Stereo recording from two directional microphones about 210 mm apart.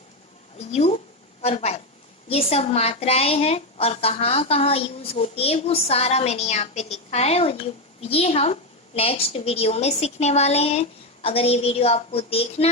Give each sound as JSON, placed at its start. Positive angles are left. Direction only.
{"t": 0.7, "sound": "a woman's voice", "side_deg": 30}
{"t": 1.4, "sound": "a sound", "side_deg": 30}
{"t": 2.3, "sound": "a woman's voice", "side_deg": 30}